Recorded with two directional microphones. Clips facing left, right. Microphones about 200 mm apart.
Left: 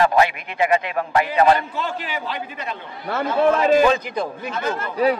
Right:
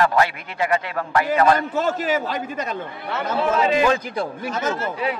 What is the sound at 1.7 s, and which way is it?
A man's voice, 45° right (ahead or behind).